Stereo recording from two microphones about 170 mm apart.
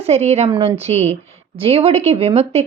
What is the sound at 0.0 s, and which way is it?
Speech, 40° right (ahead or behind).